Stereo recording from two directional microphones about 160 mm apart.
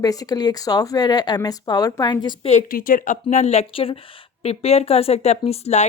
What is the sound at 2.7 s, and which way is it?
Speech, 60° left (ahead or behind).